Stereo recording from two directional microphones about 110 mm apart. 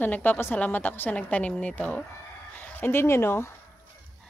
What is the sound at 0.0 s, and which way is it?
A woman's voice, 15° left (ahead or behind).